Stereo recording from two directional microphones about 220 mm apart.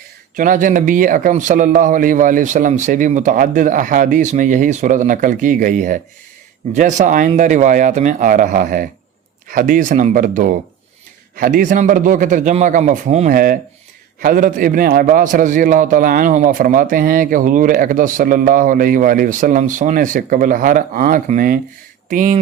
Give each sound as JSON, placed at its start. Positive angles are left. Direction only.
{"t": 0.3, "sound": "a man's voice", "side_deg": -35}